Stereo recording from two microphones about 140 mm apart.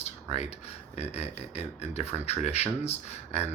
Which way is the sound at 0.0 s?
50° left (ahead or behind).